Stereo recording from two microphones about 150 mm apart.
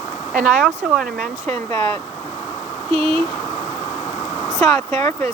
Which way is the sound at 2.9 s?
40° right (ahead or behind).